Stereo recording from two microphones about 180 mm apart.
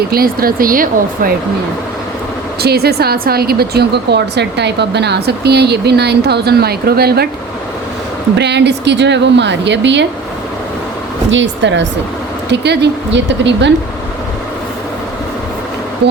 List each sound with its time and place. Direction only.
0.1 s speech: 55° right (ahead or behind)
2.6 s speech: 60° right (ahead or behind)
8.4 s a woman's voice: 70° right (ahead or behind)
11.3 s speech: 90° right
12.5 s a woman's voice: 70° right (ahead or behind)